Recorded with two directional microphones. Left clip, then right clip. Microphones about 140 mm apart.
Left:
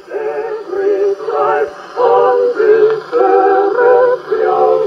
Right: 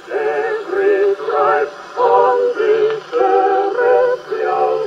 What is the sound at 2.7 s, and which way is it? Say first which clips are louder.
Synthetic singing: left 5 dB; 80° left.